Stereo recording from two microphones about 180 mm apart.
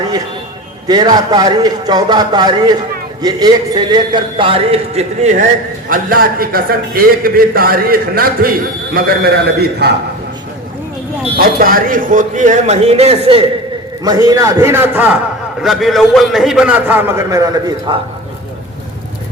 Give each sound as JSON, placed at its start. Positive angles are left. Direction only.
{"t": 0.9, "sound": "a man's voice", "side_deg": -20}
{"t": 5.9, "sound": "a man's voice", "side_deg": -55}
{"t": 11.3, "sound": "a man's voice", "side_deg": -55}
{"t": 14.0, "sound": "a man's voice", "side_deg": -20}